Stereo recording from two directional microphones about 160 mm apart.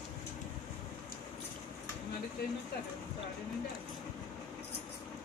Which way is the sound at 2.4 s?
75° left (ahead or behind).